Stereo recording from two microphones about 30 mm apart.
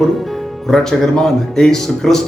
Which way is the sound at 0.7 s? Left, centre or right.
Centre.